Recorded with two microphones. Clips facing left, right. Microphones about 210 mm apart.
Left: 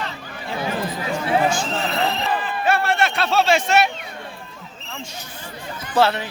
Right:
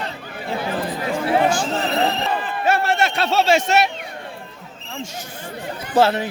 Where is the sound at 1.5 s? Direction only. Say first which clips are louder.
Right 2 dB; 35° right (ahead or behind).